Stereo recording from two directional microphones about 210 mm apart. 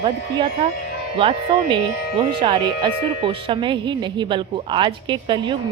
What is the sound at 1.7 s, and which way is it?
Speech, 25° right (ahead or behind).